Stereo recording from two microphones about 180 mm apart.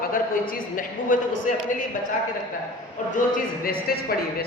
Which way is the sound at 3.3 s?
55° left (ahead or behind).